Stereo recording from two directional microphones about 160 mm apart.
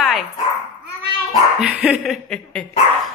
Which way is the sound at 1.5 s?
5° right (ahead or behind).